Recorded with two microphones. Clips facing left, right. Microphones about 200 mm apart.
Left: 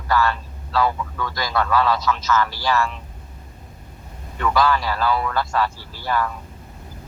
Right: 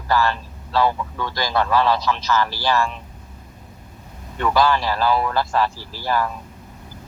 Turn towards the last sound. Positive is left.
turn(degrees=-30)  # may be behind; listen again after turning